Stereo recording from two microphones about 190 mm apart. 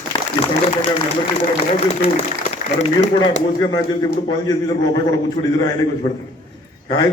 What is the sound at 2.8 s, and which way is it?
A man's voice, 25° left (ahead or behind).